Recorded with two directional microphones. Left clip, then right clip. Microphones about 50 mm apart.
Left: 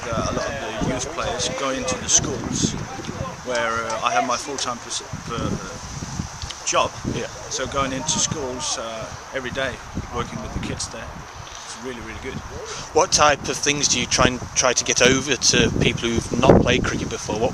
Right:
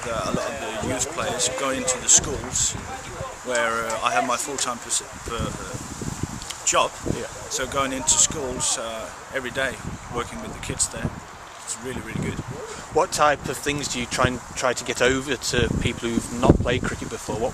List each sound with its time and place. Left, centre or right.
0.0 s speech: centre
0.6 s a sound: centre
1.1 s speech: centre
6.7 s speech: centre
12.9 s speech: left